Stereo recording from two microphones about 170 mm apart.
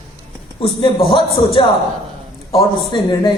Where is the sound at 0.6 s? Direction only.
35° left (ahead or behind).